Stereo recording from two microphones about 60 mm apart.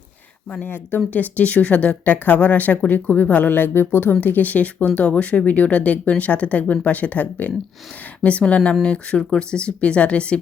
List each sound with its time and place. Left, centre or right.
0.6 s speech: left